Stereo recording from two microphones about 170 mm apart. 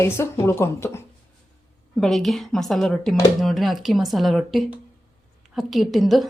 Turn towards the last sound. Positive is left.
turn(degrees=0)  # may be behind; listen again after turning